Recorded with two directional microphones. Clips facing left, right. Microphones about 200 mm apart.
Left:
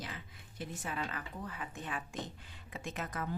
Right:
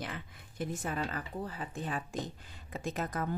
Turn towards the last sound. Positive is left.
turn(degrees=-35)  # may be behind; listen again after turning